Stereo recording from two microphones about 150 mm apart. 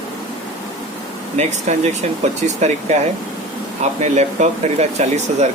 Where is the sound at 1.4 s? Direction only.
50° right (ahead or behind).